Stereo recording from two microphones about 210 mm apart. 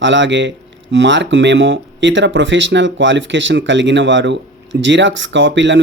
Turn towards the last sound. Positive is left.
turn(degrees=-60)  # may be behind; listen again after turning